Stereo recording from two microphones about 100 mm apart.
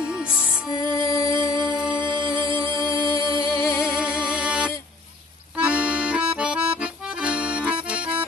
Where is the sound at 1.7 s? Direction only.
5° right (ahead or behind).